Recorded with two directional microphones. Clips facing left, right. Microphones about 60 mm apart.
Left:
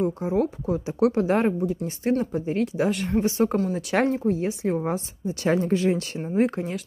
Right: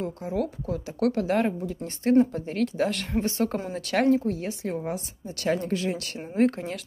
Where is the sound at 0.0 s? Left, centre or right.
Left.